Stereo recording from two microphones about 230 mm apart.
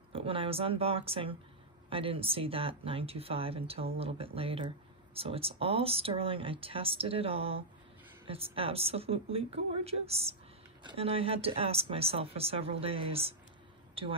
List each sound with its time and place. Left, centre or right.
0.1 s speech: right
8.5 s speech: right